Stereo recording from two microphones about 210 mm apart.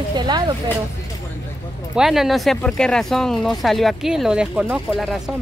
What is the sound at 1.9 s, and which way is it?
Speech, centre (ahead or behind).